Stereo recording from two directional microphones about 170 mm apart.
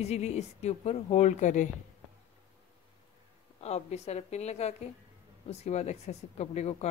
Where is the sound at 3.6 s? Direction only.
40° left (ahead or behind).